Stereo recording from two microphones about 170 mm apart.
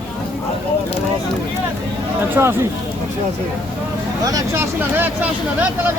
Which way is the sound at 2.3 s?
15° right (ahead or behind).